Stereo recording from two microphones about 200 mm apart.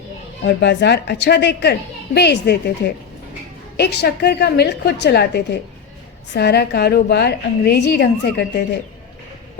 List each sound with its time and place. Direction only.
0.4 s a woman's voice: 60° left (ahead or behind)